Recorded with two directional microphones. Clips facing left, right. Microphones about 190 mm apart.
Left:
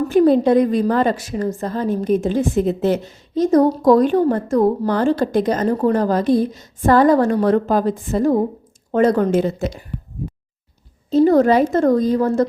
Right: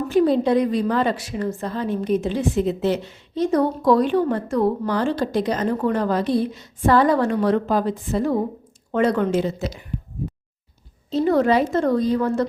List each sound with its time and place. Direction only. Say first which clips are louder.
0.1 s a woman's voice: left 4 dB; 50° left (ahead or behind)
11.1 s a woman's voice: left 5 dB; 40° left (ahead or behind)